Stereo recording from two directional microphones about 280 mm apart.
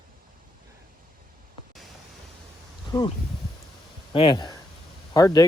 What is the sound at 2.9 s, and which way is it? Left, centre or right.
Speech, centre.